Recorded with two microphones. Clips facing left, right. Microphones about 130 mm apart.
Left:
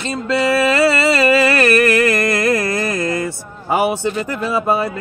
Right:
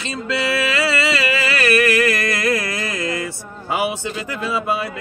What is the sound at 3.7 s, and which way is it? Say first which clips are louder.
Speech: left 5 dB; 45° left (ahead or behind).